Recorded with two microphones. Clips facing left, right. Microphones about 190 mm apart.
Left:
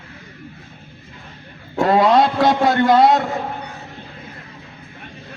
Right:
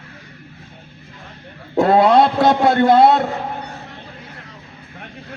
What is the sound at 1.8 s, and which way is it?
A man's voice, 25° right (ahead or behind).